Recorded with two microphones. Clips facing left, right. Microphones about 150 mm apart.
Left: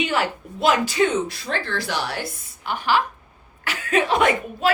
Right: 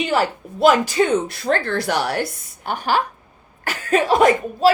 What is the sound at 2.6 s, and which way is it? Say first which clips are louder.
A woman's voice: right 1 dB; 45° right (ahead or behind).